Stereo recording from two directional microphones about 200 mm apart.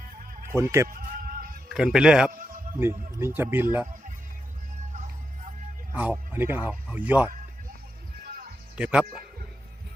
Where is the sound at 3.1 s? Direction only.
15° right (ahead or behind).